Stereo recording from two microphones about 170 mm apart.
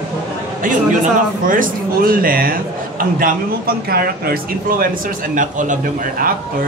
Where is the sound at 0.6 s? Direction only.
50° right (ahead or behind).